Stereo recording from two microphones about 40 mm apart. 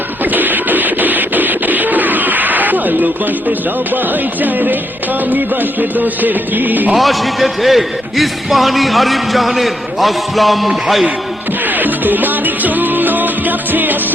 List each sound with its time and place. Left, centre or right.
0.3 s music: right
6.9 s a man's voice: centre
11.6 s music: right